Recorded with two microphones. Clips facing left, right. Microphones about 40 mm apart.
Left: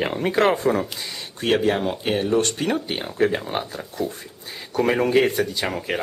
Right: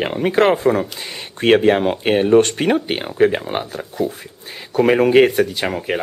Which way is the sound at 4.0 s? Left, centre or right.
Centre.